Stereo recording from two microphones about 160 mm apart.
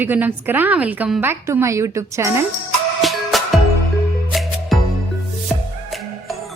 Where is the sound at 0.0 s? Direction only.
10° right (ahead or behind).